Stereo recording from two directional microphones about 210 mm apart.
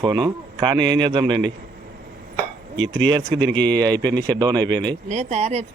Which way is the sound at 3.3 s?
60° right (ahead or behind).